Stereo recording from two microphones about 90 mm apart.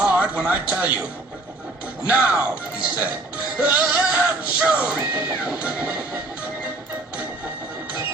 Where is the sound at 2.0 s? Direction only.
15° right (ahead or behind).